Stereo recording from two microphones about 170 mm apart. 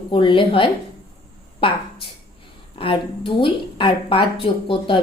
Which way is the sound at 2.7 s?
30° left (ahead or behind).